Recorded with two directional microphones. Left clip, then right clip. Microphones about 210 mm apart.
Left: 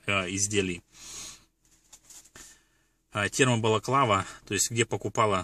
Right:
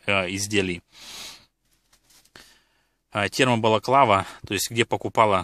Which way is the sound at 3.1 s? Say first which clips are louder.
Right 4 dB; 45° right (ahead or behind).